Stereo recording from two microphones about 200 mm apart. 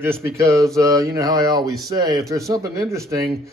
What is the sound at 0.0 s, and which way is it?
A man's voice, 10° right (ahead or behind).